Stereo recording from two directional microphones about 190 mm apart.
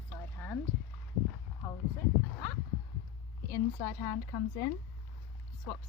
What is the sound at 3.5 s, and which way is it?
Speech, 15° left (ahead or behind).